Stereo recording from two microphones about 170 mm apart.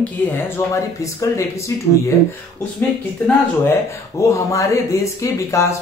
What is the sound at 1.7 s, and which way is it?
Speech, 15° left (ahead or behind).